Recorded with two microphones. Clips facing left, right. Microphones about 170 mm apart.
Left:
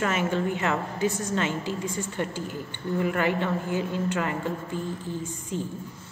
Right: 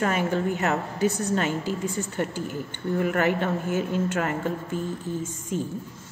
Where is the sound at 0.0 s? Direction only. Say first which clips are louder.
Right 1 dB; 40° right (ahead or behind).